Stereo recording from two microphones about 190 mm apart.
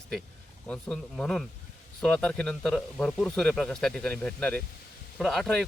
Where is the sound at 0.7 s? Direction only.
5° left (ahead or behind).